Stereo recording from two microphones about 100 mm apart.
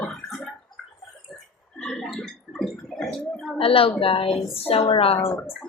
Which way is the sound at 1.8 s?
10° left (ahead or behind).